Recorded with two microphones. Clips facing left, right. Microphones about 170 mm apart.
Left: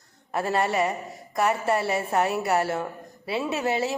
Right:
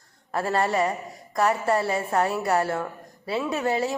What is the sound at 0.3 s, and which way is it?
A woman's voice, 20° left (ahead or behind).